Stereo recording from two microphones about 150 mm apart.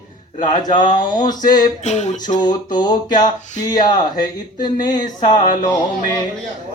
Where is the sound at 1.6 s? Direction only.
50° left (ahead or behind).